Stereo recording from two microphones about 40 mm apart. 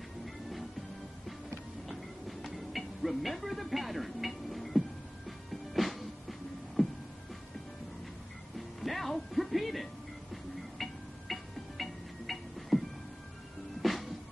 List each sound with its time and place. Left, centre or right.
1.9 s music: centre
8.5 s music: centre
13.8 s music: centre